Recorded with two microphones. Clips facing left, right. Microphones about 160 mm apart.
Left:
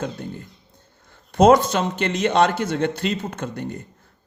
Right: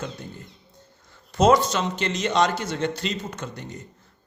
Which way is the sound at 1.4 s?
55° left (ahead or behind).